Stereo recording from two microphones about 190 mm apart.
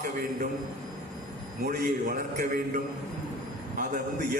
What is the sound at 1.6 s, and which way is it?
A man's voice, 45° right (ahead or behind).